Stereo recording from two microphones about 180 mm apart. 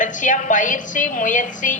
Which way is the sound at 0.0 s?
45° left (ahead or behind).